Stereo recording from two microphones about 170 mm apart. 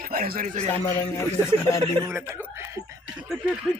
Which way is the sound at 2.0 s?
15° right (ahead or behind).